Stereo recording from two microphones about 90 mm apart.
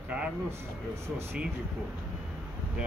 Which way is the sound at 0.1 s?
15° right (ahead or behind).